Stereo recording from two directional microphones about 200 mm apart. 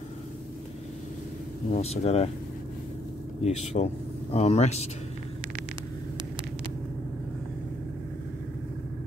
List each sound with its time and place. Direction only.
1.8 s speech: 30° left (ahead or behind)
3.4 s speech: 30° left (ahead or behind)